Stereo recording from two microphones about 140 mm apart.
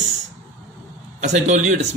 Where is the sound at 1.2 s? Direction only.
55° right (ahead or behind).